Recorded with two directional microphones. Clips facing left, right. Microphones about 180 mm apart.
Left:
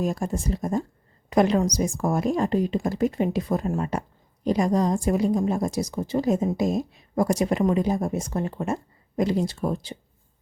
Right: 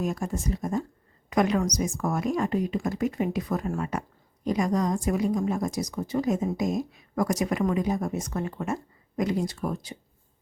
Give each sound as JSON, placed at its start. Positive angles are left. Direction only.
{"t": 0.0, "sound": "a woman's voice", "side_deg": 30}